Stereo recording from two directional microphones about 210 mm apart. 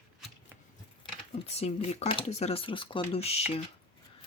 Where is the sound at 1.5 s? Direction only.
30° left (ahead or behind).